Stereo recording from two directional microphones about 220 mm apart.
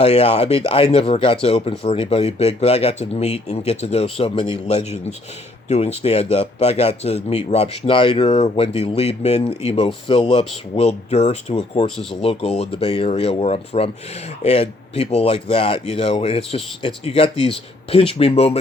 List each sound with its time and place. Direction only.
0.0 s speech: 25° left (ahead or behind)